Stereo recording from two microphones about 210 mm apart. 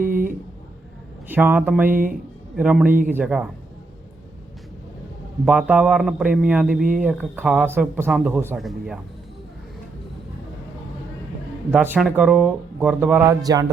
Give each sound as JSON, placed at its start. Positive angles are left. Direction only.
{"t": 0.0, "sound": "a sound", "side_deg": -40}
{"t": 1.3, "sound": "a man's voice", "side_deg": -10}
{"t": 5.5, "sound": "a man's voice", "side_deg": -5}
{"t": 11.7, "sound": "speech", "side_deg": -5}